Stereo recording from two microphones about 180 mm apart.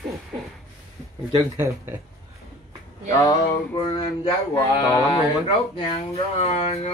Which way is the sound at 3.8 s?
25° left (ahead or behind).